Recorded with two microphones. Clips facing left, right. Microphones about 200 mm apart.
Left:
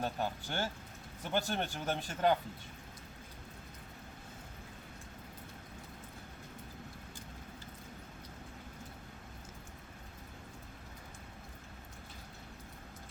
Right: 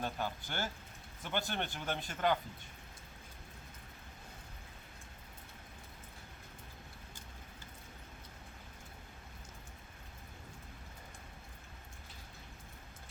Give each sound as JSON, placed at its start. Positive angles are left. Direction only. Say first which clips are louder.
{"t": 0.0, "sound": "speech", "louder": "left 2 dB", "side_deg": 30}